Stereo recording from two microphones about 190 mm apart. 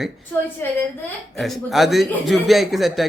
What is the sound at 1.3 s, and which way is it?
Speech, centre (ahead or behind).